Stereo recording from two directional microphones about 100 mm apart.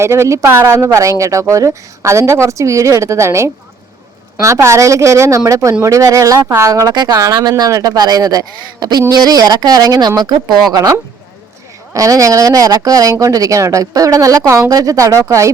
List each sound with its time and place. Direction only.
0.0 s a woman's voice: 25° right (ahead or behind)